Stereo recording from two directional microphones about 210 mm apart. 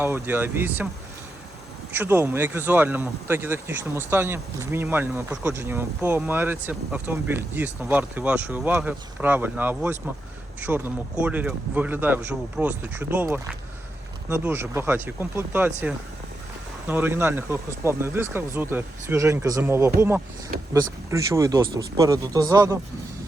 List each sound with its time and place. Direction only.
0.0 s speech: 10° right (ahead or behind)
1.9 s speech: 10° right (ahead or behind)